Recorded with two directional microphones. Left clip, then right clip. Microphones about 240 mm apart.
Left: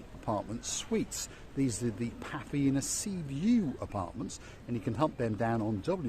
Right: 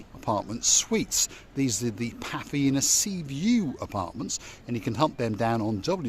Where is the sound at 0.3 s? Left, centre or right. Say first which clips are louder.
Right 9 dB; right.